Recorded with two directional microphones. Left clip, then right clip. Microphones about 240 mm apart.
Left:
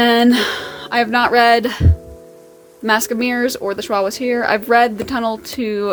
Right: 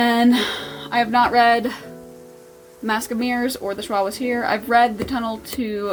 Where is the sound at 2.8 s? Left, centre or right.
Left.